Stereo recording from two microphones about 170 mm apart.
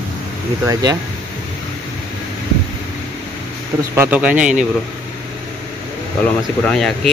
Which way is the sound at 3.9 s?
10° right (ahead or behind).